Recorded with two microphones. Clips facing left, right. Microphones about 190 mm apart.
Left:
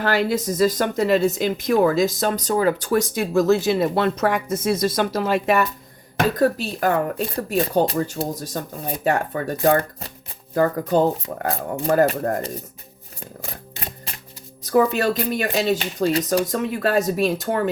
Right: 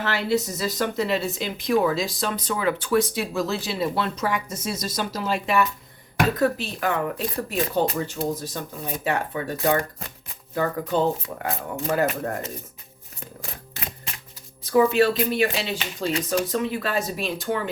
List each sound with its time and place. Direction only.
0.0 s speech: 45° left (ahead or behind)
14.6 s speech: 45° left (ahead or behind)